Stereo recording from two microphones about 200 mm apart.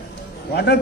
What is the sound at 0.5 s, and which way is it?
Speech, 55° left (ahead or behind).